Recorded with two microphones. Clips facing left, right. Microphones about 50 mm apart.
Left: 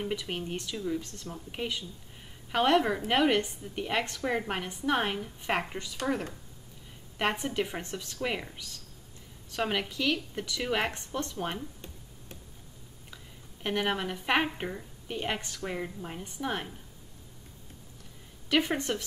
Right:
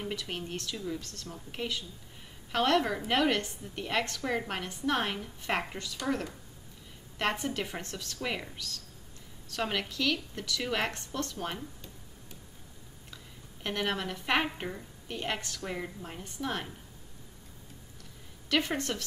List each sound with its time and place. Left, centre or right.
0.0 s speech: centre
1.0 s speech: centre
7.2 s speech: centre
8.5 s speech: left
13.1 s a woman's voice: centre
18.5 s speech: centre